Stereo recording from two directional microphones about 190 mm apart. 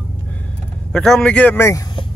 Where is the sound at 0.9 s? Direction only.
5° left (ahead or behind).